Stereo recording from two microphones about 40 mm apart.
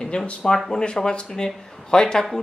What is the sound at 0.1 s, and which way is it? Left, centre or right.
Speech, left.